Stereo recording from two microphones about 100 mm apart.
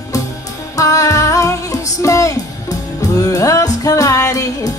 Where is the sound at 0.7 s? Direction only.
35° left (ahead or behind).